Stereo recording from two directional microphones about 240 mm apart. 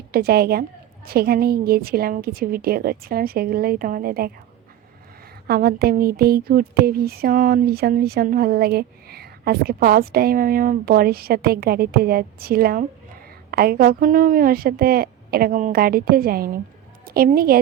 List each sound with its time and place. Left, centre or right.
0.1 s speech: right
5.5 s speech: right